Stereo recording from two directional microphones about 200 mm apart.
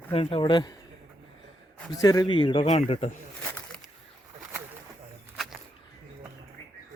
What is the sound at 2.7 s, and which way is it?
Speech, 35° left (ahead or behind).